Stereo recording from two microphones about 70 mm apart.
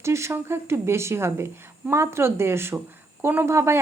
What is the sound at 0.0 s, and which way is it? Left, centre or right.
Speech, right.